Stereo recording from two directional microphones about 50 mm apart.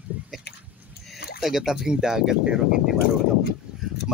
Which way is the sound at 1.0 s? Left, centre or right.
Centre.